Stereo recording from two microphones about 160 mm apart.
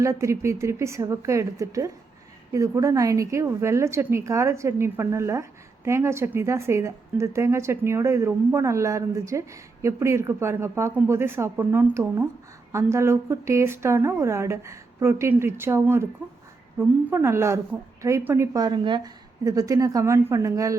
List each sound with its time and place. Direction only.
0.0 s a woman's voice: 20° right (ahead or behind)